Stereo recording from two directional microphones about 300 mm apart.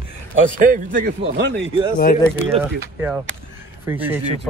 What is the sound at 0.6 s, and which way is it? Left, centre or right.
A man's voice, right.